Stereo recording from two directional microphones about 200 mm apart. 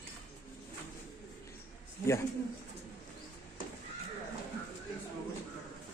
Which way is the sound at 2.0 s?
15° left (ahead or behind).